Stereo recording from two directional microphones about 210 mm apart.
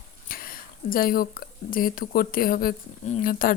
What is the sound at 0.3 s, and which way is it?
Speech, 45° left (ahead or behind).